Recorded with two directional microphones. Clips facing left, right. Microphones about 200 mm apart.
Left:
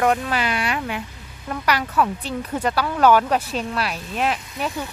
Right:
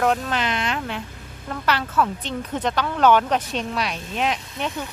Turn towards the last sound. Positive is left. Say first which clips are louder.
# left 1 dB
turn(degrees=5)  # may be behind; listen again after turning